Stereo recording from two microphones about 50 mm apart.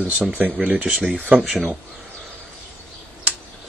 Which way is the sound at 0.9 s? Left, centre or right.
Centre.